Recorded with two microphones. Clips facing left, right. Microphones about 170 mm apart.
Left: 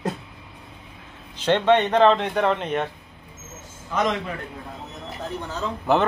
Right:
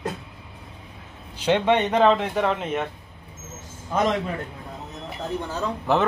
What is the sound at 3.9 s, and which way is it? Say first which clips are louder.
Speech: right 1 dB; 40° right (ahead or behind).